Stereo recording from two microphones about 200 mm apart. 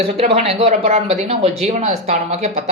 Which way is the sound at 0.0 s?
30° right (ahead or behind).